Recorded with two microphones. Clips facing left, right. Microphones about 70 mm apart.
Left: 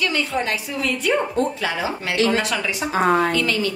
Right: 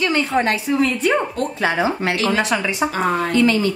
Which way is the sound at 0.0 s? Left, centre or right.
Right.